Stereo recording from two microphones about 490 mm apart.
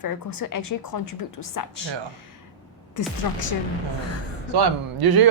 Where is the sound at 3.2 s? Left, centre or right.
Left.